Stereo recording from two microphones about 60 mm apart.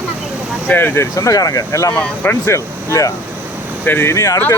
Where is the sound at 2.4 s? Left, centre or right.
Left.